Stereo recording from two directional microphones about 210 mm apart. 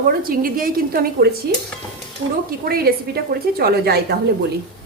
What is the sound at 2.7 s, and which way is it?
A woman's voice, 45° right (ahead or behind).